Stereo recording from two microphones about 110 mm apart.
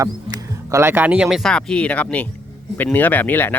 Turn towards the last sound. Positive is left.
turn(degrees=15)  # may be behind; listen again after turning